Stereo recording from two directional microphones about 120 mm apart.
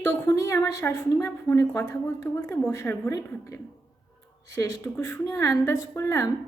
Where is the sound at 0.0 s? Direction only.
25° left (ahead or behind).